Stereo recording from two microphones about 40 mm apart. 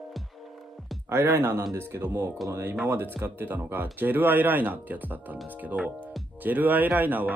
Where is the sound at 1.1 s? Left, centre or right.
Right.